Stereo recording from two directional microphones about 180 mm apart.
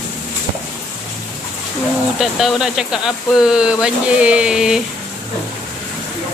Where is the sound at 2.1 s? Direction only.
Centre (ahead or behind).